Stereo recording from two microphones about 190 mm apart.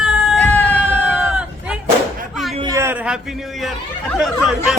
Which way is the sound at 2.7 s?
15° right (ahead or behind).